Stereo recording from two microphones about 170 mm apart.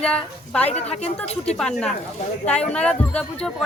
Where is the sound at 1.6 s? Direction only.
5° left (ahead or behind).